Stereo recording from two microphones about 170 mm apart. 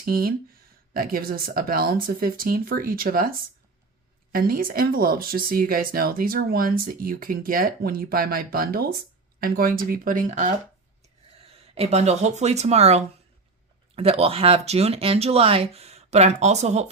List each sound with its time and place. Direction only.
0.0 s speech: 60° right (ahead or behind)
11.7 s speech: 40° right (ahead or behind)